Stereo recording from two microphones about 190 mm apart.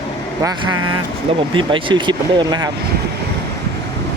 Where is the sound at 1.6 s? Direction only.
25° right (ahead or behind).